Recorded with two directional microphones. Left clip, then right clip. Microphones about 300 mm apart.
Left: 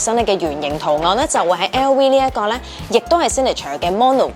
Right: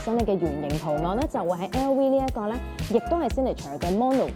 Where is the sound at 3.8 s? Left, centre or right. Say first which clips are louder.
Left 10 dB; left.